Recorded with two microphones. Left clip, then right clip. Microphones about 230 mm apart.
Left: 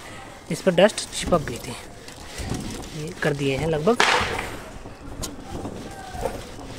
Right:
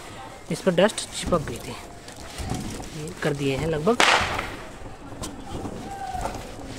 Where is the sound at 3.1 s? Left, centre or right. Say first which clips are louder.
Left 2 dB; centre.